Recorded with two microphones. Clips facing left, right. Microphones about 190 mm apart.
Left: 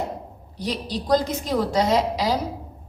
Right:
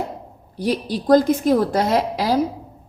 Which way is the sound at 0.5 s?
55° right (ahead or behind).